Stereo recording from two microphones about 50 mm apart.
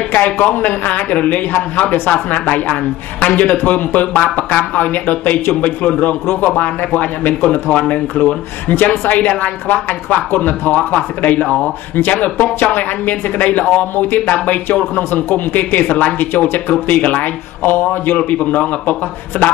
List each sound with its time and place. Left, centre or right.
0.1 s a woman's voice: left
16.8 s speech: left
17.6 s speech: left
18.1 s speech: left